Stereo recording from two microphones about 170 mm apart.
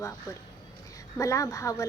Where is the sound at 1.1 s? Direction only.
20° left (ahead or behind).